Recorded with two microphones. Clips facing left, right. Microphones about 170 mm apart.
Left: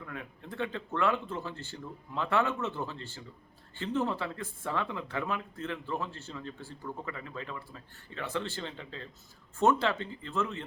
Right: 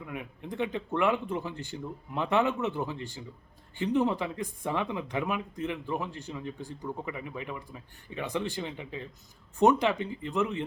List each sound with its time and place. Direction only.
0.0 s speech: 15° right (ahead or behind)